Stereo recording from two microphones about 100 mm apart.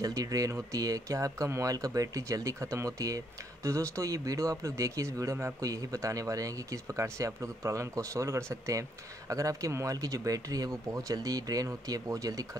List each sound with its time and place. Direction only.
0.0 s speech: 35° right (ahead or behind)